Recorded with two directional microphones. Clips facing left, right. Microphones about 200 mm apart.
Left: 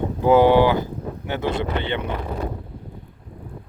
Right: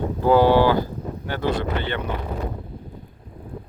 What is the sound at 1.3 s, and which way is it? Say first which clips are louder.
Speech: even; 20° left (ahead or behind).